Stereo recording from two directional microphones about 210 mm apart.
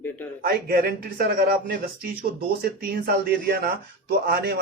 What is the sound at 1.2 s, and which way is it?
Speech, 45° right (ahead or behind).